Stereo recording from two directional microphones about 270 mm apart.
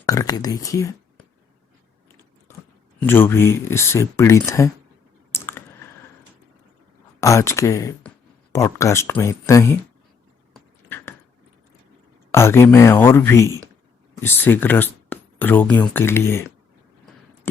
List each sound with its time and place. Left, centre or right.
0.0 s speech: centre
3.1 s speech: centre
5.3 s typing: centre
7.2 s speech: centre
10.5 s a sound: centre
12.3 s speech: centre